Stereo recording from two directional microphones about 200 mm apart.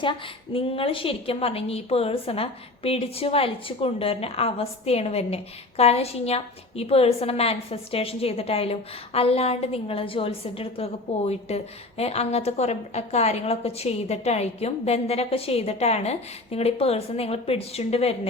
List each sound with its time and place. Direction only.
0.0 s a woman's voice: 25° left (ahead or behind)